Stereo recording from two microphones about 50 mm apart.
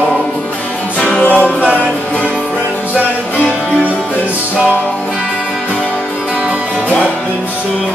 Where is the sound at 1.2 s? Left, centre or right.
Left.